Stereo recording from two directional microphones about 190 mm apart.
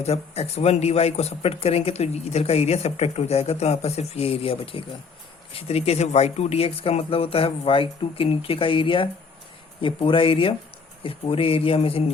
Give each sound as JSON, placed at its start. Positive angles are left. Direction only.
{"t": 0.0, "sound": "speech", "side_deg": 35}